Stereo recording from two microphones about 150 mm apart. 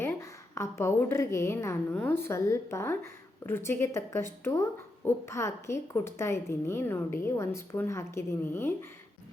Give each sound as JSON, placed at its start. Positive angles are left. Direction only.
{"t": 0.0, "sound": "a woman's voice", "side_deg": 15}